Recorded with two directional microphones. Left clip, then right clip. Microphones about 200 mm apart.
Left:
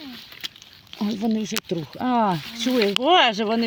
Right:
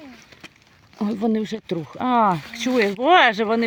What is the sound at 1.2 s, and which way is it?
Speech, 20° right (ahead or behind).